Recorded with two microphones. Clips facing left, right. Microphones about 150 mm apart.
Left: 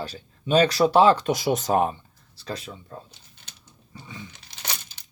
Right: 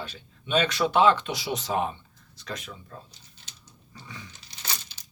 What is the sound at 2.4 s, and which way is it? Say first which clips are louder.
Speech: left 4 dB; 30° left (ahead or behind).